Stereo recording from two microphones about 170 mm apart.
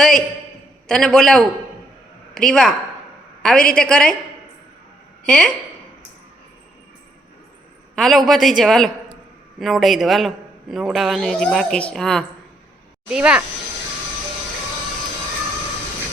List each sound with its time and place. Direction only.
0.9 s a man's voice: 5° left (ahead or behind)
5.2 s speech: 5° left (ahead or behind)
7.9 s a man's voice: centre (ahead or behind)